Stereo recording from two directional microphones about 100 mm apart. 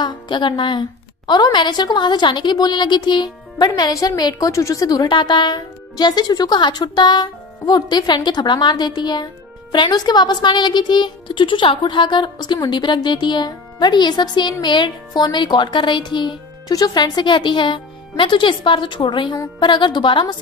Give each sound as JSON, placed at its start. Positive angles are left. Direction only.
{"t": 0.0, "sound": "a woman's voice", "side_deg": 50}